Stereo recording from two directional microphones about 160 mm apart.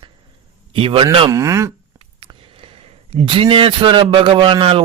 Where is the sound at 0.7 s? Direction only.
30° right (ahead or behind).